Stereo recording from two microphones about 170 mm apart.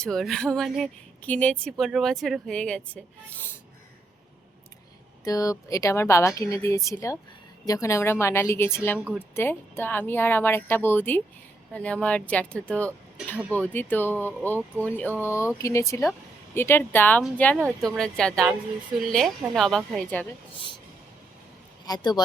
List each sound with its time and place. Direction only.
0.0 s speech: 5° left (ahead or behind)
5.2 s a woman's voice: 20° left (ahead or behind)
21.8 s a woman's voice: 25° left (ahead or behind)